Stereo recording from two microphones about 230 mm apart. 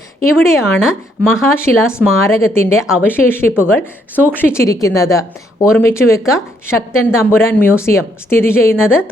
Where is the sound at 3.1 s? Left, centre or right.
Centre.